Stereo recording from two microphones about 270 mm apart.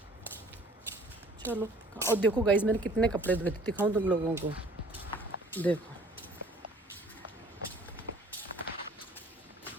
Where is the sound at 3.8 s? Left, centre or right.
Centre.